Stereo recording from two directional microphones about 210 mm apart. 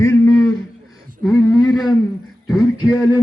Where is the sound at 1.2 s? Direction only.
Centre (ahead or behind).